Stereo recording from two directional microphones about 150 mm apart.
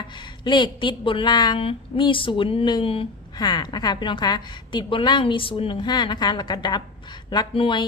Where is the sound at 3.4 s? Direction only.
25° left (ahead or behind).